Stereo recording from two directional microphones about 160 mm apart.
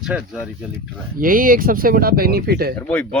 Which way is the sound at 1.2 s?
60° right (ahead or behind).